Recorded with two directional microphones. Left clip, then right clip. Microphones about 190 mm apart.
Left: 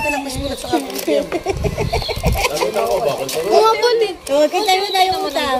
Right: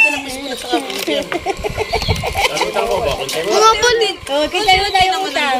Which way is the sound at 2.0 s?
45° left (ahead or behind).